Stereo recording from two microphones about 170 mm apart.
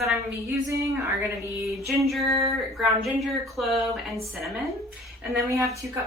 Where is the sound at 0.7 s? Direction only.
15° right (ahead or behind).